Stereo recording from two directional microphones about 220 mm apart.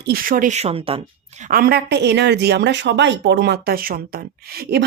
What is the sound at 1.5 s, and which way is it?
Speech, 40° right (ahead or behind).